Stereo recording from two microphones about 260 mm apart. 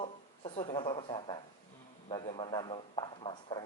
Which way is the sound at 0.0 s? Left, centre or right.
Centre.